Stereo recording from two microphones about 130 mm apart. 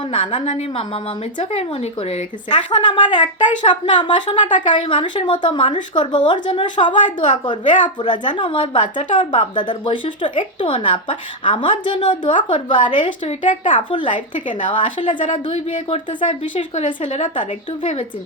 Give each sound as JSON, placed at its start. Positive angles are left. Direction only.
{"t": 0.1, "sound": "a woman's voice", "side_deg": 40}
{"t": 0.4, "sound": "speech", "side_deg": 55}
{"t": 2.6, "sound": "a woman's voice", "side_deg": 35}
{"t": 4.4, "sound": "speech", "side_deg": 75}
{"t": 4.7, "sound": "a woman's voice", "side_deg": 40}
{"t": 13.5, "sound": "speech", "side_deg": 75}
{"t": 13.9, "sound": "a woman's voice", "side_deg": 40}